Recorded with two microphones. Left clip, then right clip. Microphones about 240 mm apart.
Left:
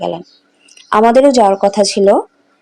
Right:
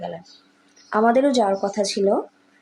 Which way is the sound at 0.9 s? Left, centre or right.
Left.